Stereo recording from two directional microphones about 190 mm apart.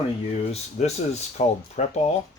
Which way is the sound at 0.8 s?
40° left (ahead or behind).